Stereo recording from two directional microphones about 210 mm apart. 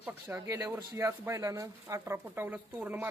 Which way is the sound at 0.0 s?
10° right (ahead or behind).